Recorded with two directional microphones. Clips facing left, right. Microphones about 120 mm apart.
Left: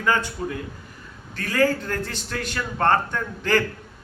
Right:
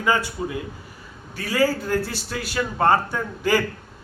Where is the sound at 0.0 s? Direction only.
10° right (ahead or behind).